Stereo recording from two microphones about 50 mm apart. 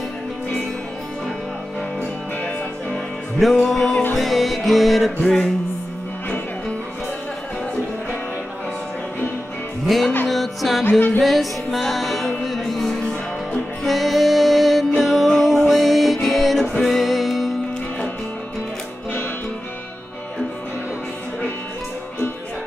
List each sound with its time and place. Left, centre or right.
2.9 s music: centre
9.9 s music: centre
10.8 s music: left
11.1 s music: centre